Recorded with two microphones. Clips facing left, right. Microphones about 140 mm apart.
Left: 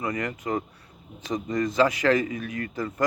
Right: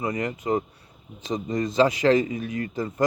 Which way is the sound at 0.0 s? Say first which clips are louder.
Right 2 dB; 25° right (ahead or behind).